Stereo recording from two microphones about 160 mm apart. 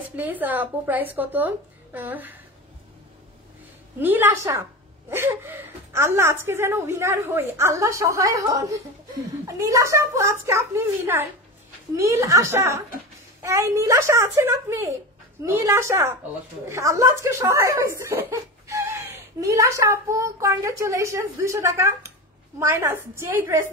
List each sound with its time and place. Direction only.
0.1 s a woman's voice: 10° right (ahead or behind)
4.0 s a woman's voice: 15° right (ahead or behind)